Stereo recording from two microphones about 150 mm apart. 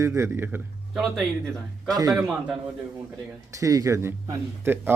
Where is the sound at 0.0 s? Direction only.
20° right (ahead or behind).